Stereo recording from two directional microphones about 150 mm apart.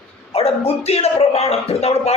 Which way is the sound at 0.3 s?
40° left (ahead or behind).